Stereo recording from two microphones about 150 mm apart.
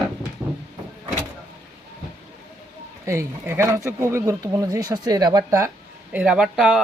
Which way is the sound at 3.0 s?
20° right (ahead or behind).